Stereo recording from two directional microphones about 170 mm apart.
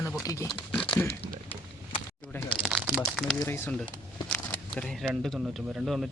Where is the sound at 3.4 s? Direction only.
15° left (ahead or behind).